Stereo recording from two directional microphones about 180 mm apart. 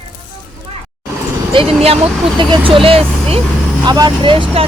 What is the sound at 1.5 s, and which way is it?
Speech, 30° right (ahead or behind).